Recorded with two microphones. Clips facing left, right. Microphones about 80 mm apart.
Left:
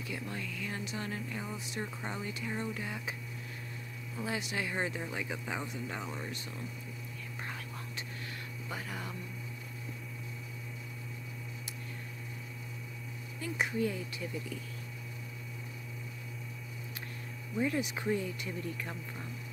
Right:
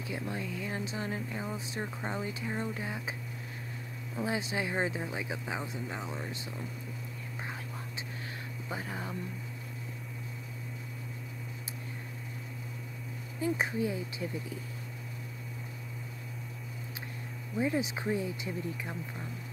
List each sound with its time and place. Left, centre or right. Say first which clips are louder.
0.0 s speech: right 3 dB; right
4.2 s speech: right 3 dB; right
8.6 s speech: right 3 dB; right
13.4 s speech: right 4 dB; right
13.7 s speech: right 1 dB; centre
17.6 s speech: right 2 dB; centre